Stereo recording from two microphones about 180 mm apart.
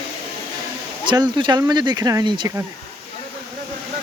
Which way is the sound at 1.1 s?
25° right (ahead or behind).